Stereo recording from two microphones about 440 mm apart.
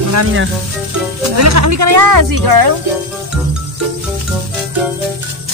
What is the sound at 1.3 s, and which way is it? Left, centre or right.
Speech, right.